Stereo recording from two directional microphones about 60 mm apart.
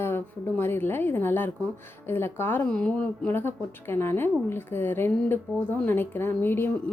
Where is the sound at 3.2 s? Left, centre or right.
Left.